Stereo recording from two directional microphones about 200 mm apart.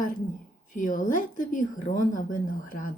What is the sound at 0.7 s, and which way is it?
A woman's voice, 40° left (ahead or behind).